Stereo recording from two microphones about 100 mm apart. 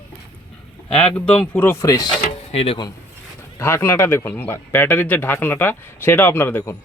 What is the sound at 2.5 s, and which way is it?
Speech, 80° left.